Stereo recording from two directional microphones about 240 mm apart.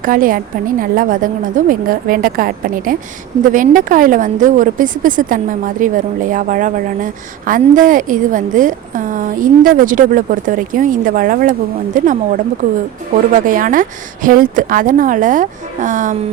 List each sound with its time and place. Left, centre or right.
0.0 s speech: right